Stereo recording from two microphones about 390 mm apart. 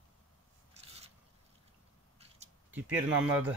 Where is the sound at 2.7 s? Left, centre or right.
Centre.